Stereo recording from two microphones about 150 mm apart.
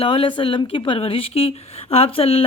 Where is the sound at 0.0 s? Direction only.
35° left (ahead or behind).